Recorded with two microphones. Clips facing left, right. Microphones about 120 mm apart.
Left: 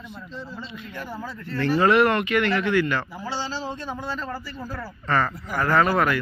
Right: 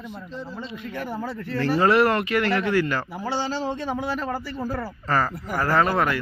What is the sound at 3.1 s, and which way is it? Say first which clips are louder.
A man's voice: right 3 dB; 55° right (ahead or behind).